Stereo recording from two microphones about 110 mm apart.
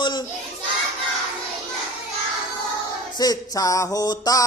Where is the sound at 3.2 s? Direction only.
35° left (ahead or behind).